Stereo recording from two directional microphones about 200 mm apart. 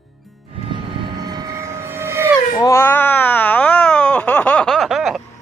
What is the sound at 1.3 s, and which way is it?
Vehicle, 15° right (ahead or behind).